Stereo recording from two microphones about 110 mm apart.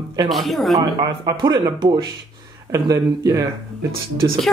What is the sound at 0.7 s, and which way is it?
Speech, 35° right (ahead or behind).